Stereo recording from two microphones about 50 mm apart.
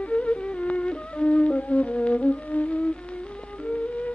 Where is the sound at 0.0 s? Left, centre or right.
Left.